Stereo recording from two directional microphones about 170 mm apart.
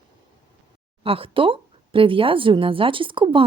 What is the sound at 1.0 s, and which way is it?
Speech, 35° right (ahead or behind).